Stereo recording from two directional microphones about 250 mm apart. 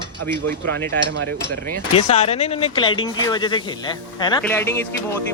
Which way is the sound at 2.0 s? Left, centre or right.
Left.